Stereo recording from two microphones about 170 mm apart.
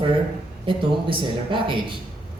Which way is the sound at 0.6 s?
30° right (ahead or behind).